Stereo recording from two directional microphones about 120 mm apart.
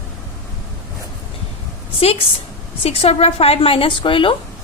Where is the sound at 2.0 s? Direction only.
55° left (ahead or behind).